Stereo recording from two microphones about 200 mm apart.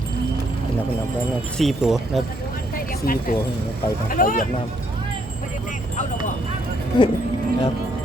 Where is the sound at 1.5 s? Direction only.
Centre (ahead or behind).